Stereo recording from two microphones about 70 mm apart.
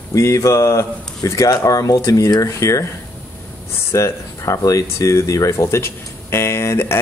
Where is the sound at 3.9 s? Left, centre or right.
Left.